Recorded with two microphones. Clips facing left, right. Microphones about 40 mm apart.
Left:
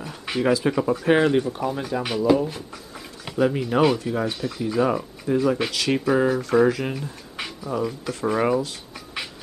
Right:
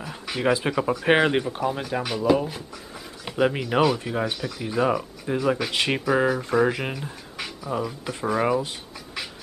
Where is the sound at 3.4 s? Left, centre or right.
Right.